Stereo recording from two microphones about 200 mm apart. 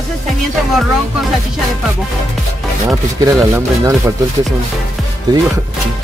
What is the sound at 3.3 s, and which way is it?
Speech, 15° right (ahead or behind).